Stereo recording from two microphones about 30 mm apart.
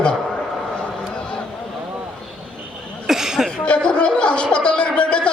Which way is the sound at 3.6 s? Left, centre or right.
Left.